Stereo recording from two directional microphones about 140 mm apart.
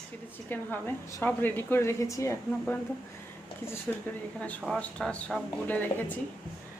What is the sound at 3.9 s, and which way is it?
A woman's voice, 5° left (ahead or behind).